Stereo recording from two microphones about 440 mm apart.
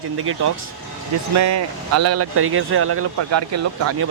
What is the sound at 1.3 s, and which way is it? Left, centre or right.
Speech, right.